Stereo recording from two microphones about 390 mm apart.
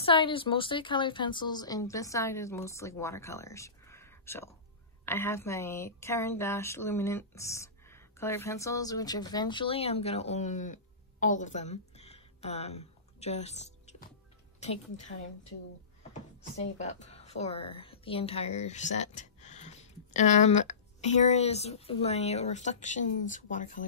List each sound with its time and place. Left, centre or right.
0.0 s a woman's voice: centre
16.1 s a woman's voice: centre